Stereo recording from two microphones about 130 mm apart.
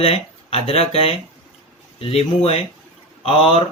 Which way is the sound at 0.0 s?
50° left (ahead or behind).